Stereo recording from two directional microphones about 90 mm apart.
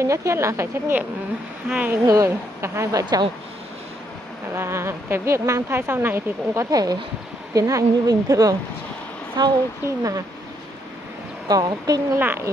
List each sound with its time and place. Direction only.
0.0 s speech: 35° right (ahead or behind)
2.0 s speech: 35° right (ahead or behind)
4.6 s a woman's voice: 30° right (ahead or behind)
11.4 s a woman's voice: 45° right (ahead or behind)
12.2 s speech: 20° right (ahead or behind)